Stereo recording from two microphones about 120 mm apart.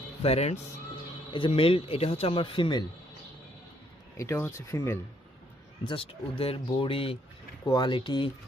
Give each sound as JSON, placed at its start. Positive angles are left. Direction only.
{"t": 0.2, "sound": "speech", "side_deg": 60}
{"t": 1.3, "sound": "a man's voice", "side_deg": 45}
{"t": 4.2, "sound": "speech", "side_deg": 20}
{"t": 5.9, "sound": "a man's voice", "side_deg": 50}
{"t": 7.6, "sound": "speech", "side_deg": 35}